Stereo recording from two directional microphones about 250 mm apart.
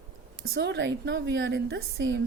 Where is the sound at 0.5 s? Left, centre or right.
Right.